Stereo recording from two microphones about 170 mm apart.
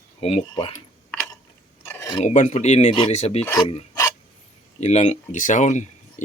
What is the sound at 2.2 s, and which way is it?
Speech, 45° left (ahead or behind).